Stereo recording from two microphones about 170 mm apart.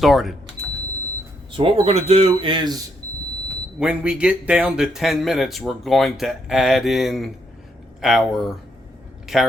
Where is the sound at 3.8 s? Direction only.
5° right (ahead or behind).